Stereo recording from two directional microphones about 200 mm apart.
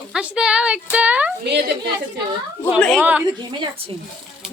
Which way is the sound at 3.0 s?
10° right (ahead or behind).